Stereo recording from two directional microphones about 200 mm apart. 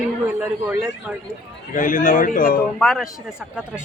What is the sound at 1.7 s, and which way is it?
Speech, 40° left (ahead or behind).